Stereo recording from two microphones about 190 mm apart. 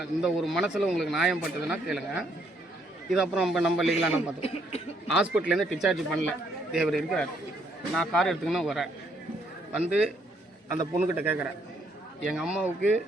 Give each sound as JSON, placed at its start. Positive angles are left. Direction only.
{"t": 0.0, "sound": "speech", "side_deg": 0}
{"t": 4.4, "sound": "speech", "side_deg": 30}
{"t": 5.1, "sound": "speech", "side_deg": -5}
{"t": 10.8, "sound": "a man's voice", "side_deg": -10}